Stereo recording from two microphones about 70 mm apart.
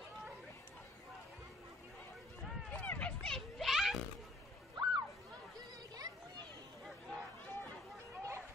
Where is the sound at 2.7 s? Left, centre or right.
Centre.